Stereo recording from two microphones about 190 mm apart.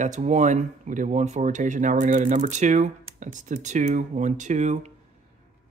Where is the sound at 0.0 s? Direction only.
40° right (ahead or behind).